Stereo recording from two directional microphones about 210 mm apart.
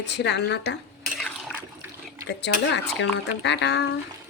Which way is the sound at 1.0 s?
Centre (ahead or behind).